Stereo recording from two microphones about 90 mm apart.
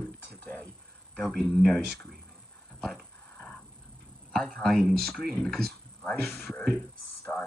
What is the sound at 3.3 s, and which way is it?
Wild animals, 15° left (ahead or behind).